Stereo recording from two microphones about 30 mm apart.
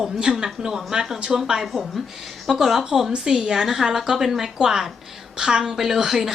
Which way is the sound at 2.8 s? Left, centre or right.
Centre.